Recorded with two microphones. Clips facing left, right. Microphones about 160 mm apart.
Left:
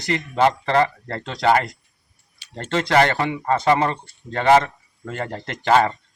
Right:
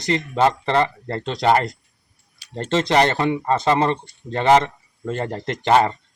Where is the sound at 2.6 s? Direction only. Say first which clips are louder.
Right 1 dB; 20° right (ahead or behind).